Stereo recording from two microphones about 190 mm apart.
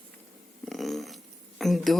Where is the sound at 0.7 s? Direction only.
Centre (ahead or behind).